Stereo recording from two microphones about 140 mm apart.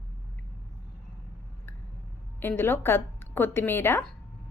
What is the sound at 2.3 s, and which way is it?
A woman's voice, 15° left (ahead or behind).